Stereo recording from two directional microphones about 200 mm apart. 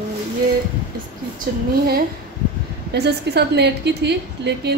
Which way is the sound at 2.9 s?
55° right (ahead or behind).